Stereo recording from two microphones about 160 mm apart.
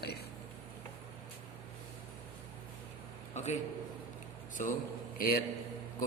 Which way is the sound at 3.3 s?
45° left (ahead or behind).